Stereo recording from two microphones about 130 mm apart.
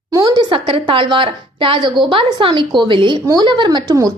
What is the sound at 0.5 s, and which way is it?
A woman's voice, 40° right (ahead or behind).